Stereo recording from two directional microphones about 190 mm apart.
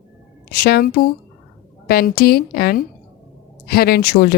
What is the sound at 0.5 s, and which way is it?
A woman's voice, 55° left (ahead or behind).